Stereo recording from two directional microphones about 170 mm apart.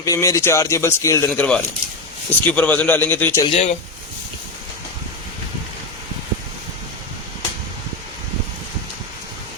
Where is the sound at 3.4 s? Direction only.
35° left (ahead or behind).